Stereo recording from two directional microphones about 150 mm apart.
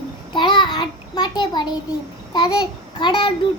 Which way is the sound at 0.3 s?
30° left (ahead or behind).